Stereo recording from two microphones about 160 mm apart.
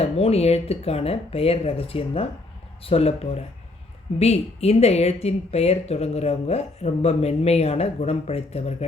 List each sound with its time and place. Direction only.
0.0 s a woman's voice: 40° left (ahead or behind)